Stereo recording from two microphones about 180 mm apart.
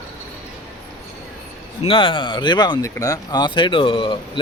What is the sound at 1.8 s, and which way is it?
Speech, 30° left (ahead or behind).